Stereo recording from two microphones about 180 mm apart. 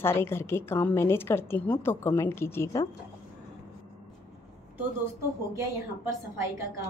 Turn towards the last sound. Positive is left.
turn(degrees=-15)  # may be behind; listen again after turning